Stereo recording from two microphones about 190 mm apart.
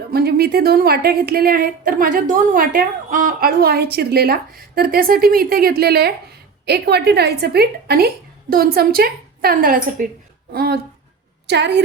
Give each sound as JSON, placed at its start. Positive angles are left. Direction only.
{"t": 0.1, "sound": "a woman's voice", "side_deg": -55}